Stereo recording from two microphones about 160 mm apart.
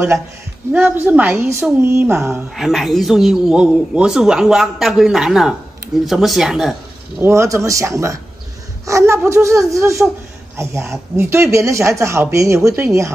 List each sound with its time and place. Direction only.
0.7 s speech: 10° right (ahead or behind)
2.5 s a man's voice: centre (ahead or behind)
7.2 s speech: 15° right (ahead or behind)